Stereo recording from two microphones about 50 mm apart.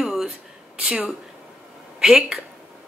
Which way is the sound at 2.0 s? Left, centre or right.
Centre.